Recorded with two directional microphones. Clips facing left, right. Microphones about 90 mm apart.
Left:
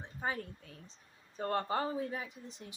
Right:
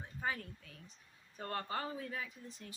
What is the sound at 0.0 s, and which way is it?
Speech, 30° left (ahead or behind).